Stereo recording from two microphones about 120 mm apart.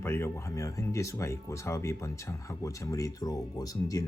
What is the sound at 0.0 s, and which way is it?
Speech, 20° left (ahead or behind).